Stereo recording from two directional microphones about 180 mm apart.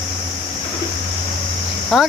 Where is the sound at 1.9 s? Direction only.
Centre (ahead or behind).